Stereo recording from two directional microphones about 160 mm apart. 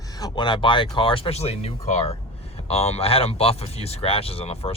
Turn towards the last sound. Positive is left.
turn(degrees=35)  # may be behind; listen again after turning